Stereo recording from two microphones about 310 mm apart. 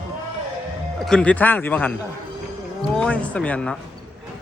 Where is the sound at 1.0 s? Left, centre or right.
Centre.